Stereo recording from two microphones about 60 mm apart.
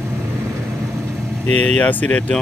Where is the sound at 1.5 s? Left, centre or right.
Left.